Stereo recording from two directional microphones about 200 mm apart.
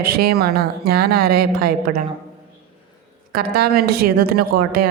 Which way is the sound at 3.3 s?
50° right (ahead or behind).